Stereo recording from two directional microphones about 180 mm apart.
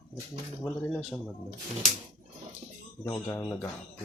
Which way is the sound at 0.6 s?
10° left (ahead or behind).